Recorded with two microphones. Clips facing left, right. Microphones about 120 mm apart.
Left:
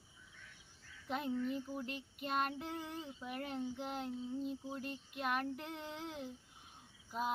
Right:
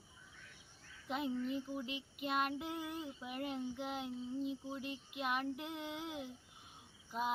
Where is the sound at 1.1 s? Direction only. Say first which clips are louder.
Even; 5° right (ahead or behind).